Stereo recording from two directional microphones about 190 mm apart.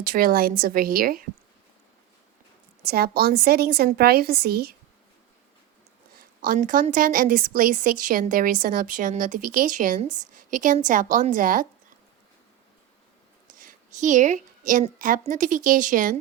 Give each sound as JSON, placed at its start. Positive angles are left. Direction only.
{"t": 0.0, "sound": "a woman's voice", "side_deg": -50}
{"t": 2.8, "sound": "a woman's voice", "side_deg": -55}
{"t": 6.1, "sound": "a woman's voice", "side_deg": -45}
{"t": 13.5, "sound": "a woman's voice", "side_deg": -45}